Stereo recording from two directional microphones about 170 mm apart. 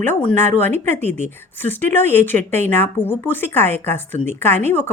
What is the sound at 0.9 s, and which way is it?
Speech, 10° left (ahead or behind).